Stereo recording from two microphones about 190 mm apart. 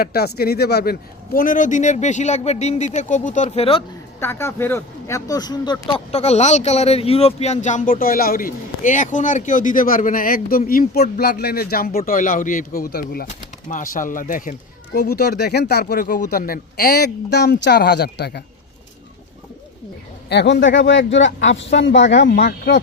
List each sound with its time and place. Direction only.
0.0 s a man's voice: 55° left (ahead or behind); by 3.8 s 30° left (ahead or behind)
4.2 s speech: 10° left (ahead or behind)
6.1 s speech: 35° left (ahead or behind)
14.9 s speech: 55° left (ahead or behind)
20.3 s speech: 65° left (ahead or behind)